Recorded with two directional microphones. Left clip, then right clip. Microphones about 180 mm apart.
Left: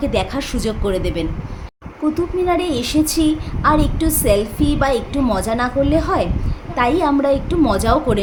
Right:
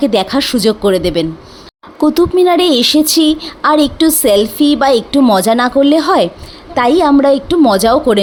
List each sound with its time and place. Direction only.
0.0 s a woman's voice: 50° right (ahead or behind)
2.0 s a woman's voice: 60° right (ahead or behind)